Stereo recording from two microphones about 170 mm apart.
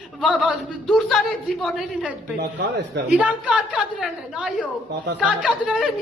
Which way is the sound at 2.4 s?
85° right.